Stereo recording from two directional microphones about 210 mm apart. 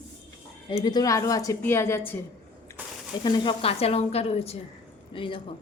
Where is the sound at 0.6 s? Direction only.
20° left (ahead or behind).